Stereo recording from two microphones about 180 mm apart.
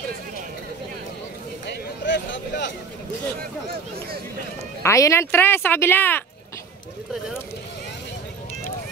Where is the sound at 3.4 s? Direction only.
55° right (ahead or behind).